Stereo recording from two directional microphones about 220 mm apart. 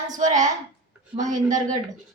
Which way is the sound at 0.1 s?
35° right (ahead or behind).